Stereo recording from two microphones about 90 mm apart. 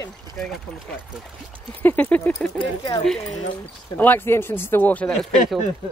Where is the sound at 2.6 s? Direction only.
55° left (ahead or behind).